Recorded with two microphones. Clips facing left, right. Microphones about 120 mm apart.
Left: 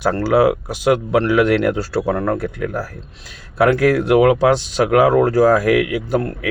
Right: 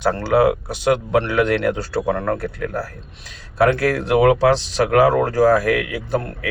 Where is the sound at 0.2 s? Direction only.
10° left (ahead or behind).